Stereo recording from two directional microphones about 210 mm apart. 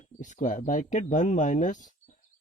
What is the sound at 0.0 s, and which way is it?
Speech, 35° left (ahead or behind).